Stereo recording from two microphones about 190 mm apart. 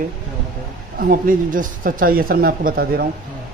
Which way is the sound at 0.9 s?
50° right (ahead or behind).